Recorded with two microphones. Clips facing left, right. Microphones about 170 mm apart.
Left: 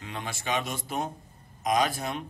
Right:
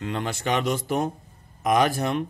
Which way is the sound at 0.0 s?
65° right (ahead or behind).